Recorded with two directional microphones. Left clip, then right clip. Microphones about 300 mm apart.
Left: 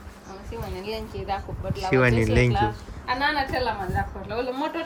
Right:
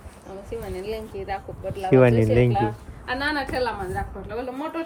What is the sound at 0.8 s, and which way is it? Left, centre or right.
Speech, centre.